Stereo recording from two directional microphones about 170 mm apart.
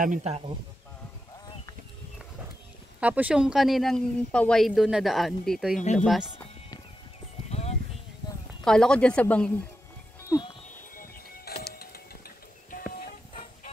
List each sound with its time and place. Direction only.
0.0 s a man's voice: 45° right (ahead or behind)
3.0 s speech: 10° right (ahead or behind)
5.8 s speech: 45° left (ahead or behind)
7.4 s a sound: 40° left (ahead or behind)
8.6 s speech: 5° left (ahead or behind)
11.0 s music: 60° left (ahead or behind)